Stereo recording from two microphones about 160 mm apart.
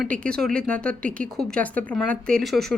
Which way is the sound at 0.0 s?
5° left (ahead or behind).